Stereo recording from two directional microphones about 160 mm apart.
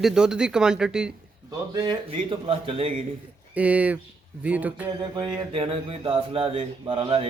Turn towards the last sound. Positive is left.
turn(degrees=-35)  # may be behind; listen again after turning